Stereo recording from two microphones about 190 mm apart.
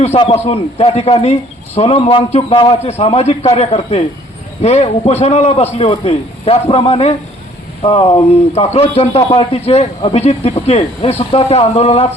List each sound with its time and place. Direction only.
0.0 s a man's voice: 35° left (ahead or behind)